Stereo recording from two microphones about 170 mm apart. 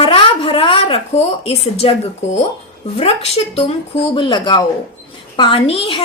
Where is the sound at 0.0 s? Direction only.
35° left (ahead or behind).